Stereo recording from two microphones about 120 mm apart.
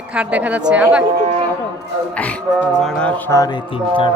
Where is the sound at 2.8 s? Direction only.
5° left (ahead or behind).